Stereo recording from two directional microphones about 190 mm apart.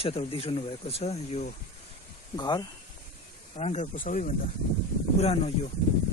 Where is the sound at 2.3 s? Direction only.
20° left (ahead or behind).